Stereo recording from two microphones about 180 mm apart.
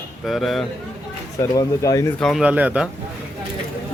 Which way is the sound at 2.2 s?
Centre (ahead or behind).